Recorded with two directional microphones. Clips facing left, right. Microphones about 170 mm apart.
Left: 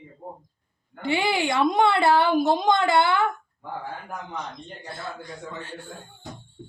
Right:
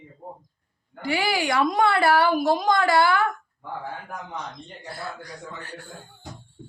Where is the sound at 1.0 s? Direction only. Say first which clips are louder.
Left 1 dB; 25° left (ahead or behind).